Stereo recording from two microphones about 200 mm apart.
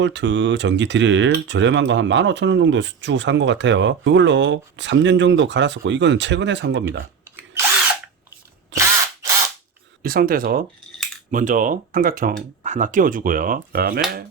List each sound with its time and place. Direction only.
0.0 s speech: 65° right (ahead or behind)
8.7 s drill: 15° right (ahead or behind)
10.0 s speech: 45° right (ahead or behind)